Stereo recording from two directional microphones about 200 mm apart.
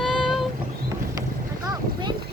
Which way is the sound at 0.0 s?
Centre (ahead or behind).